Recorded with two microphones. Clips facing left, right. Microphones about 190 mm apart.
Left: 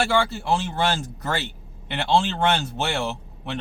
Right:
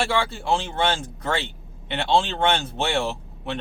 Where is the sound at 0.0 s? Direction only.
Centre (ahead or behind).